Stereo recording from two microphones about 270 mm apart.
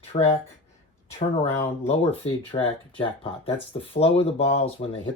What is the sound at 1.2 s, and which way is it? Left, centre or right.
Speech, left.